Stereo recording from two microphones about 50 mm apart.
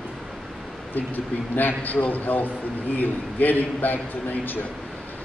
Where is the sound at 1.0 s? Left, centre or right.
Left.